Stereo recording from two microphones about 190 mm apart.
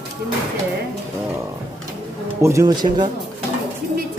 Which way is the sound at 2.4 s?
15° right (ahead or behind).